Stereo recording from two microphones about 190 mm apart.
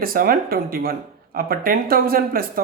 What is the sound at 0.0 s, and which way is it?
Speech, 50° right (ahead or behind).